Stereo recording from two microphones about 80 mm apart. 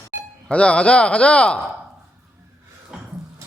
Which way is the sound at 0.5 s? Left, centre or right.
Centre.